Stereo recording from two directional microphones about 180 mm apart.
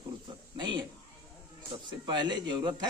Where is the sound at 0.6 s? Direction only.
25° right (ahead or behind).